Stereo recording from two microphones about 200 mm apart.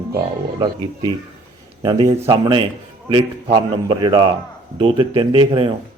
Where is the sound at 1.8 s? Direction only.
20° right (ahead or behind).